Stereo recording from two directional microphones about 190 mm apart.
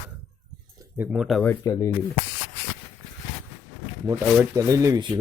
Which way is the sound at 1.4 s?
15° left (ahead or behind).